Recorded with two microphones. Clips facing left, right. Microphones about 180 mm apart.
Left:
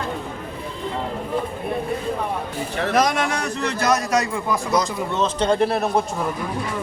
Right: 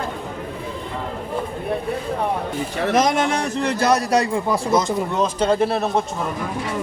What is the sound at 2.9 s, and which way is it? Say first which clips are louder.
A man's voice: right 2 dB; 25° right (ahead or behind).